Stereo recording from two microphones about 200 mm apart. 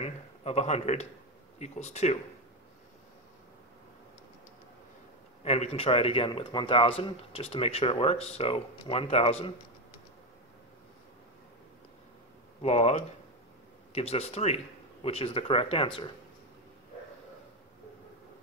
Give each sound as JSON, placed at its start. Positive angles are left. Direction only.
{"t": 0.0, "sound": "a man's voice", "side_deg": 30}
{"t": 5.4, "sound": "a man's voice", "side_deg": 30}
{"t": 12.6, "sound": "a man's voice", "side_deg": 30}